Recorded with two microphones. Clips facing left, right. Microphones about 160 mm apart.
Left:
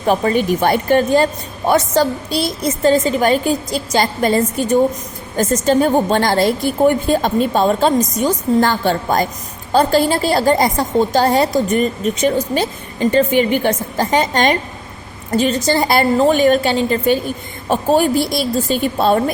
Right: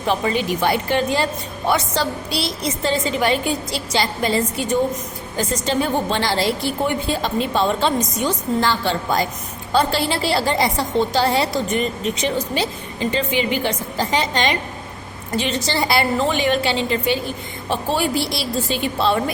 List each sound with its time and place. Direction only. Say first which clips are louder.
0.0 s a woman's voice: left 5 dB; 45° left (ahead or behind)